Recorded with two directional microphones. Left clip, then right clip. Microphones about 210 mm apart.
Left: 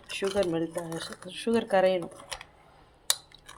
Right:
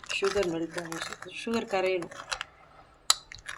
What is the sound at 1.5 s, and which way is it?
Cutlery, 25° left (ahead or behind).